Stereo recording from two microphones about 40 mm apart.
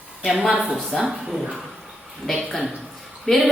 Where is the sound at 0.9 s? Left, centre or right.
Centre.